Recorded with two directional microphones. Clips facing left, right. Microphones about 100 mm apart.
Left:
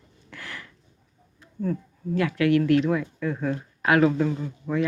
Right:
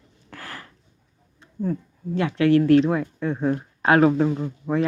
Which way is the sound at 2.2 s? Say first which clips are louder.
Right 3 dB; 30° right (ahead or behind).